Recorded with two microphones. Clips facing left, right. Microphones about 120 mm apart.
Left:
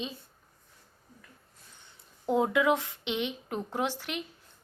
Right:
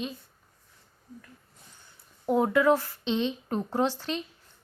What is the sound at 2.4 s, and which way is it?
Speech, 20° left (ahead or behind).